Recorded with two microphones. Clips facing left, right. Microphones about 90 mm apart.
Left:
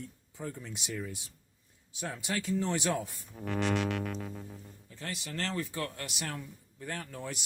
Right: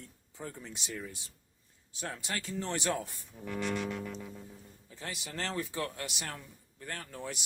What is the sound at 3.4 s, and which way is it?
Music, 65° left (ahead or behind).